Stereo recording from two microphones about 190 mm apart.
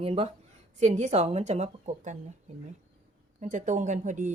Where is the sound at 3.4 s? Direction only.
40° right (ahead or behind).